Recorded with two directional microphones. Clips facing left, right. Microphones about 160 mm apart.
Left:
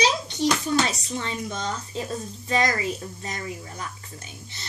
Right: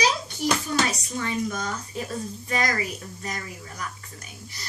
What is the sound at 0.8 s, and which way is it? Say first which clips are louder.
Speech: right 1 dB; 25° left (ahead or behind).